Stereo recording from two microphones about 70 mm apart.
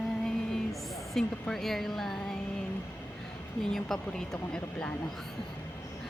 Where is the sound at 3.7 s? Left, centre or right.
Centre.